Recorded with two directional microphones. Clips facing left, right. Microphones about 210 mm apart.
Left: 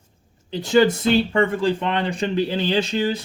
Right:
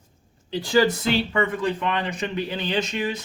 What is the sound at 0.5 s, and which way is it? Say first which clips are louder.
Speech: left 3 dB; 25° left (ahead or behind).